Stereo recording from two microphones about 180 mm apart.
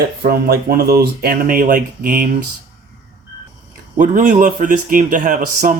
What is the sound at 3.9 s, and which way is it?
Speech, 45° right (ahead or behind).